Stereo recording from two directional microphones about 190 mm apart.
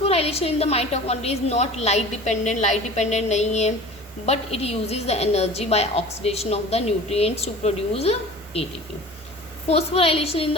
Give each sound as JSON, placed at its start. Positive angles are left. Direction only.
{"t": 0.0, "sound": "a woman's voice", "side_deg": 30}
{"t": 9.6, "sound": "a woman's voice", "side_deg": 30}